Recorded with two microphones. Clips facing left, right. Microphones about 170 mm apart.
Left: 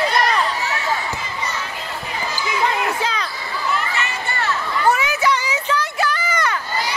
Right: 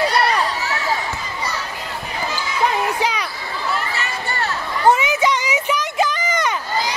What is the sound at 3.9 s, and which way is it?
Children playing, 35° right (ahead or behind).